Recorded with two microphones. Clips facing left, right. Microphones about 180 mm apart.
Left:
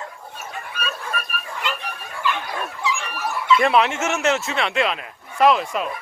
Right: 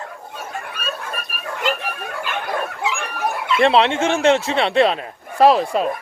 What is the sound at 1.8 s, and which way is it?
Dog, 60° right (ahead or behind).